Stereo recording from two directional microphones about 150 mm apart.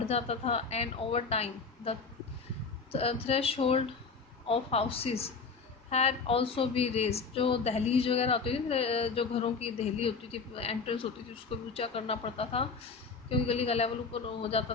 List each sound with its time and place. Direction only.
0.1 s a woman's voice: 45° left (ahead or behind)